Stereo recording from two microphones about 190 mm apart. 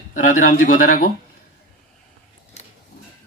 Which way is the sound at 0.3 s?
45° left (ahead or behind).